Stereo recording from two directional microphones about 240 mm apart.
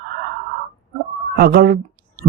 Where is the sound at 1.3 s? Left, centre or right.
Right.